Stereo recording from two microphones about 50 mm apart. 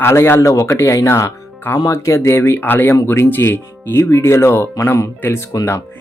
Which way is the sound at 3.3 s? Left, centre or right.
Left.